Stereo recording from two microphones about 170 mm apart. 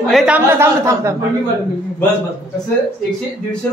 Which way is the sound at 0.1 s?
Centre (ahead or behind).